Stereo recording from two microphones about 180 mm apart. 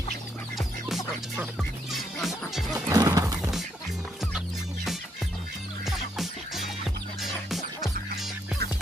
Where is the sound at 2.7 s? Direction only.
20° right (ahead or behind).